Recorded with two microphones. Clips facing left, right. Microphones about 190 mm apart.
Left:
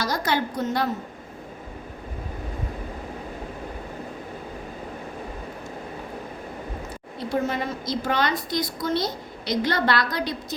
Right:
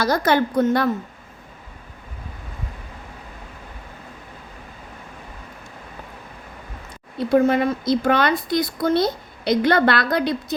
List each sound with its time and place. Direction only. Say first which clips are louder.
0.0 s a woman's voice: right 6 dB; 55° right (ahead or behind)
7.3 s a woman's voice: right 9 dB; 60° right (ahead or behind)